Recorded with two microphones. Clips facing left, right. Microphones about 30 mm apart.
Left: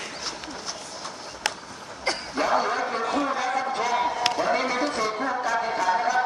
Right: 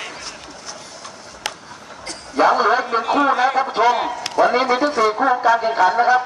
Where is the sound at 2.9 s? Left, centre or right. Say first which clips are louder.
Right 8 dB; right.